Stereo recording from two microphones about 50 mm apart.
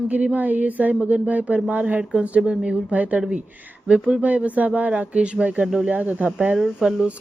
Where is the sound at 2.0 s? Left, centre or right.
Right.